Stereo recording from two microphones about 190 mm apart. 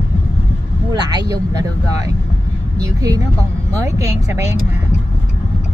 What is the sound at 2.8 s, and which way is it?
Speech, 20° right (ahead or behind).